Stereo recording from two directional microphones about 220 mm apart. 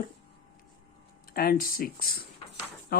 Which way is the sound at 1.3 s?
40° left (ahead or behind).